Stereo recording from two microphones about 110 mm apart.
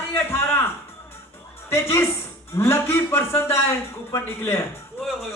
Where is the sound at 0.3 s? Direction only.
20° left (ahead or behind).